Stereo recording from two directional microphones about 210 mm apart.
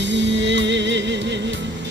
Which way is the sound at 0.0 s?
60° right (ahead or behind).